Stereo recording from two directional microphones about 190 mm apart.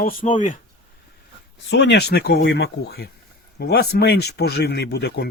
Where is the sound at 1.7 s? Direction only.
65° left (ahead or behind).